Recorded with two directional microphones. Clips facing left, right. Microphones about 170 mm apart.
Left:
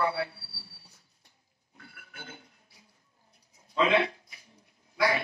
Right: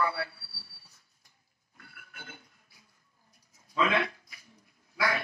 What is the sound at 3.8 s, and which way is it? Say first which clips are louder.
Speech: left 3 dB; 25° left (ahead or behind).